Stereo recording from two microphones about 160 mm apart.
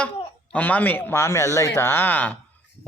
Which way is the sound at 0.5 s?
10° left (ahead or behind).